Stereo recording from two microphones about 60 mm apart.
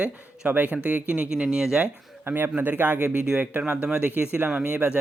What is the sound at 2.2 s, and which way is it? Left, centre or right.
A man's voice, right.